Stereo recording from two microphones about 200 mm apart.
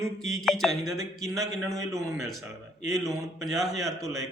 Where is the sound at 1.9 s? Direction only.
15° right (ahead or behind).